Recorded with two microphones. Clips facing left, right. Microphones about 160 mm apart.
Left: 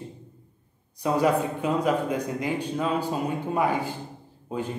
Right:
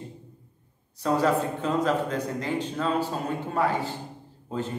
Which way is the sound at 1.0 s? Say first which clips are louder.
Left 1 dB; 15° left (ahead or behind).